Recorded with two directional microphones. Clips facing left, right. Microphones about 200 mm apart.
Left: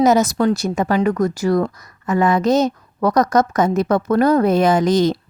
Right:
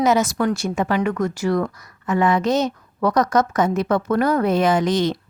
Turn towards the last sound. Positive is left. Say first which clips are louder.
# left 4 dB
turn(degrees=40)  # may be behind; listen again after turning